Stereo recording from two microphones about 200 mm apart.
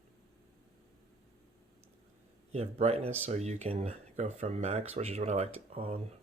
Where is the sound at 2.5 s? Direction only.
30° right (ahead or behind).